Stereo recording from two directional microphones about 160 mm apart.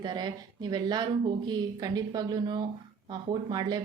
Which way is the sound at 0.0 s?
25° right (ahead or behind).